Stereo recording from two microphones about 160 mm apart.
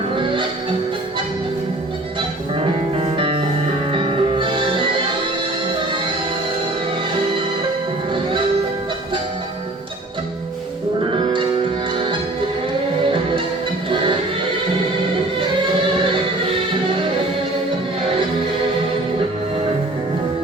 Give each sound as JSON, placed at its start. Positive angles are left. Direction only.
{"t": 2.6, "sound": "music", "side_deg": -35}
{"t": 11.1, "sound": "music", "side_deg": -30}